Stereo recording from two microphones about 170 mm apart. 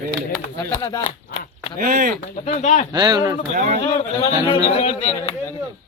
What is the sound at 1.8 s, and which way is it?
Speech, 55° right (ahead or behind).